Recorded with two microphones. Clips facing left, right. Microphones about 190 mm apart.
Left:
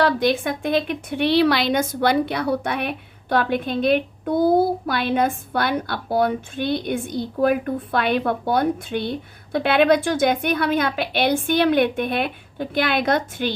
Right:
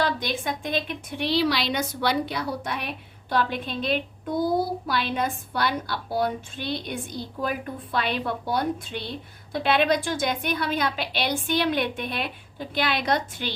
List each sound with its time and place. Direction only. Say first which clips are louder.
0.0 s a woman's voice: left 7 dB; 60° left (ahead or behind)